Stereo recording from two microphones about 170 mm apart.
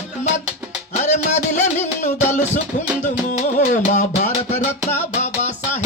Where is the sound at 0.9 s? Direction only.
45° left (ahead or behind).